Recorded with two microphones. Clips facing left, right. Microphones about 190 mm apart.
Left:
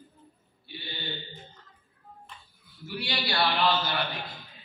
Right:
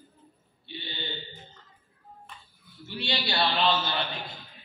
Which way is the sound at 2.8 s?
25° right (ahead or behind).